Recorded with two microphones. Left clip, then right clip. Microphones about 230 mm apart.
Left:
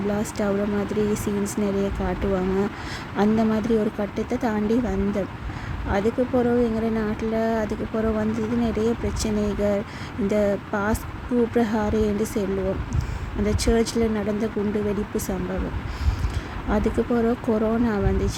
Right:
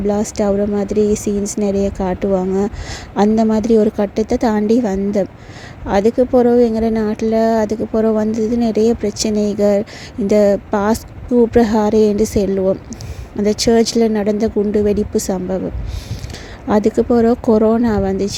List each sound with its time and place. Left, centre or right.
0.1 s a woman's voice: right
16.6 s a woman's voice: right